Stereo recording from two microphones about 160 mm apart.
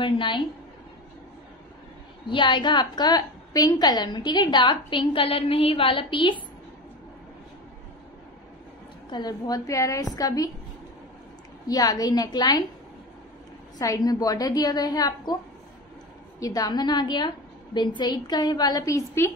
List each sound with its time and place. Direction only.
0.0 s a woman's voice: 30° left (ahead or behind)
2.2 s a woman's voice: 30° left (ahead or behind)
9.1 s a woman's voice: 25° left (ahead or behind)
11.6 s a woman's voice: 25° left (ahead or behind)
13.7 s a woman's voice: 25° left (ahead or behind)
16.3 s a woman's voice: 20° left (ahead or behind)